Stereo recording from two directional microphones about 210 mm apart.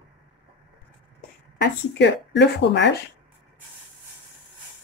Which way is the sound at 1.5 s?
55° left (ahead or behind).